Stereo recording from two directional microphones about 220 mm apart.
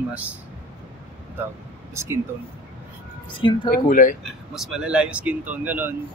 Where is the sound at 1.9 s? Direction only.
10° right (ahead or behind).